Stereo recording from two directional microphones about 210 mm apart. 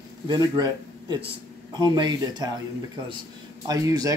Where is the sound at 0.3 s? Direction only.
20° right (ahead or behind).